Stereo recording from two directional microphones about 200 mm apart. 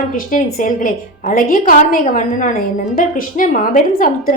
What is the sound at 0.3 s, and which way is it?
A woman's voice, 40° left (ahead or behind).